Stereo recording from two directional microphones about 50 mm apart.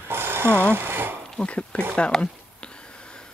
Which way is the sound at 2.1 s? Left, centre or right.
Left.